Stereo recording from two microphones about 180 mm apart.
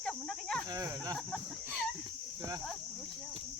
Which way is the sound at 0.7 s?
20° right (ahead or behind).